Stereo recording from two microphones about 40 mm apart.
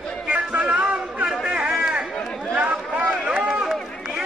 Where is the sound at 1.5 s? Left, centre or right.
Centre.